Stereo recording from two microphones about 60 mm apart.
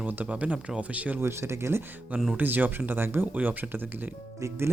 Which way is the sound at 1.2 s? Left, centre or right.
Right.